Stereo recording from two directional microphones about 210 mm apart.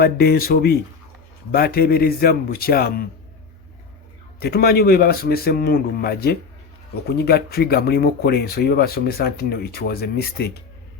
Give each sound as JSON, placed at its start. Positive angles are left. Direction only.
{"t": 0.0, "sound": "speech", "side_deg": 45}
{"t": 4.4, "sound": "speech", "side_deg": 45}